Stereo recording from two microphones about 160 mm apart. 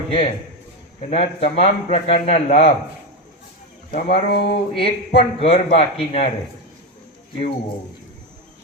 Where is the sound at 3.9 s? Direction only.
50° left (ahead or behind).